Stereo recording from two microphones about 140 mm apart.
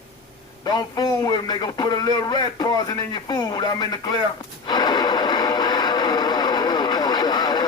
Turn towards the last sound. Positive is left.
turn(degrees=30)  # may be behind; listen again after turning